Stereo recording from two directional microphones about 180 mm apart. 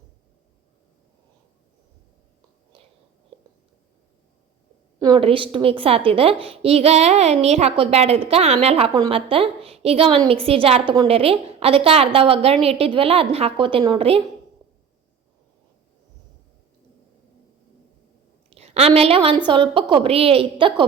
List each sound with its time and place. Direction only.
4.9 s a woman's voice: 25° right (ahead or behind)
18.5 s a woman's voice: 35° right (ahead or behind)